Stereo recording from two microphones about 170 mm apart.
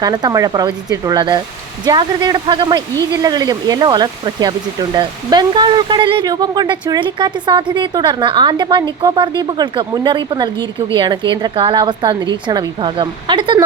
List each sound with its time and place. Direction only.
0.0 s speech: 25° right (ahead or behind)